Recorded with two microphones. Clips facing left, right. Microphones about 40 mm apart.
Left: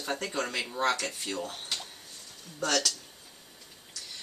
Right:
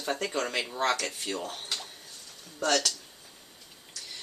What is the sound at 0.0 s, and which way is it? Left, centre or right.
Speech, centre.